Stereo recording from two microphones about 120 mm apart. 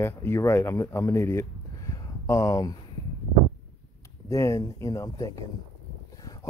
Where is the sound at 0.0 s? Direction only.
20° left (ahead or behind).